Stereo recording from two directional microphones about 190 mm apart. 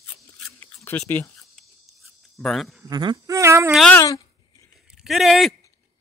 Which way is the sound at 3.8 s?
5° left (ahead or behind).